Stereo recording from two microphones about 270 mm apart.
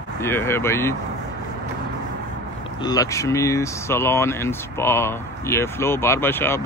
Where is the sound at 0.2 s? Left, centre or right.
Centre.